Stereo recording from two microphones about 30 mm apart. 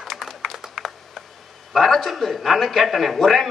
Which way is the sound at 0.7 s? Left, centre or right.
Centre.